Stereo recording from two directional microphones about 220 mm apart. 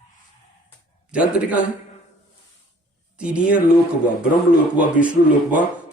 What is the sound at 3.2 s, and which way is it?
Speech, 5° right (ahead or behind).